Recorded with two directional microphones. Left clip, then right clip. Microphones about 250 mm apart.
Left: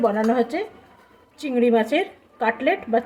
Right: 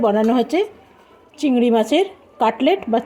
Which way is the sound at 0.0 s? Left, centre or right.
Right.